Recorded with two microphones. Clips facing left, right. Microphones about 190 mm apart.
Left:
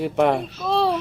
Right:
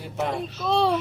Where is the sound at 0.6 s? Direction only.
Centre (ahead or behind).